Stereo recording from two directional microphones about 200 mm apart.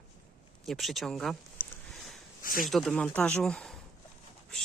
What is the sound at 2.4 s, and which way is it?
Speech, 45° left (ahead or behind).